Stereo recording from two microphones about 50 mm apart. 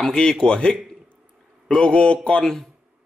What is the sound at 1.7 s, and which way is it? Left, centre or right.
Speech, left.